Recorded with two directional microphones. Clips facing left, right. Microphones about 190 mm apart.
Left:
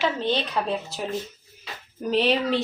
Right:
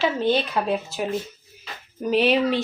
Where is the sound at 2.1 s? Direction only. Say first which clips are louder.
Right 2 dB; 5° right (ahead or behind).